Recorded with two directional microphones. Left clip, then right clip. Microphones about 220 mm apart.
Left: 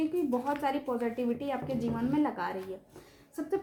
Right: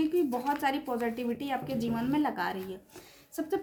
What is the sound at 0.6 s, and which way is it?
Speech, 50° right (ahead or behind).